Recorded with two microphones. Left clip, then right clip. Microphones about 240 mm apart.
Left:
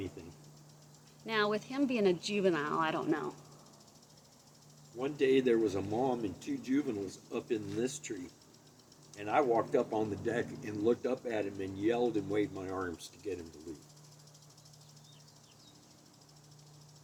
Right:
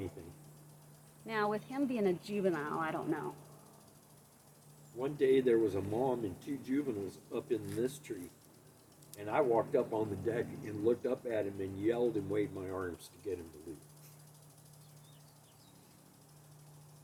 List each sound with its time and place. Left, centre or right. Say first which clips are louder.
1.3 s speech: left 3 dB; left
4.9 s speech: left 1 dB; left
9.1 s speech: left 2 dB; left